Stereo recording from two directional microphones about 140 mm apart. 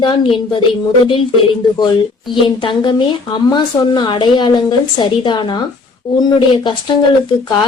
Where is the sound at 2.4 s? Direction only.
35° left (ahead or behind).